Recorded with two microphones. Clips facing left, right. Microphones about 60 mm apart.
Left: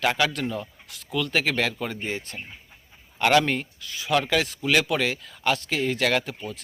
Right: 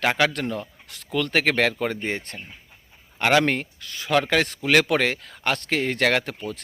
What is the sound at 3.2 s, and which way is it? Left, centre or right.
Speech, right.